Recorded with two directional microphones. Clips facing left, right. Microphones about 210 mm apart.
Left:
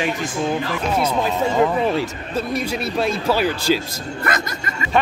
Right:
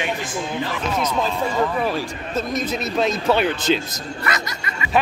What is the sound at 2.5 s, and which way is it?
Speech, 10° left (ahead or behind).